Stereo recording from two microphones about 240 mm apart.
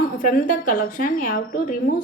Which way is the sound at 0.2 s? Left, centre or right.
Left.